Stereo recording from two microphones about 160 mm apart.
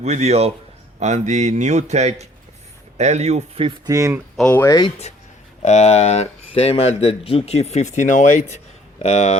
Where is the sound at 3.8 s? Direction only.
20° right (ahead or behind).